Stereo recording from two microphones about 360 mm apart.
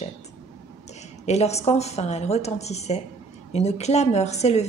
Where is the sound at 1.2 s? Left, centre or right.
Centre.